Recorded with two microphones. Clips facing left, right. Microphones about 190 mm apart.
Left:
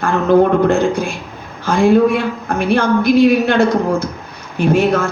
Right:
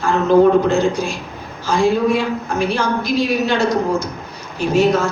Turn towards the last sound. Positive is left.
turn(degrees=55)  # may be behind; listen again after turning